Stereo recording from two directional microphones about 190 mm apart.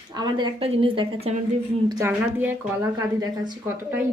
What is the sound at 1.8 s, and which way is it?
A woman's voice, 15° right (ahead or behind).